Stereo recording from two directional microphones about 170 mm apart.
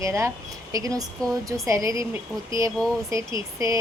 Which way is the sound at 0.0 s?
15° right (ahead or behind).